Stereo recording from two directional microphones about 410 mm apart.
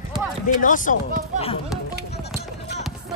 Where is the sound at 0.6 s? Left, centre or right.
Centre.